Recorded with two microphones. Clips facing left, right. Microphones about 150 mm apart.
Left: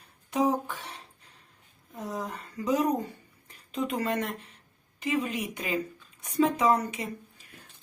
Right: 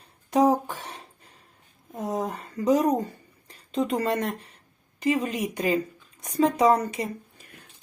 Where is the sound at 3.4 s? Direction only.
35° right (ahead or behind).